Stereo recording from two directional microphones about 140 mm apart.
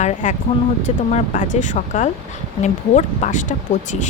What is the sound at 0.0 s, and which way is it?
Speech, 65° left (ahead or behind).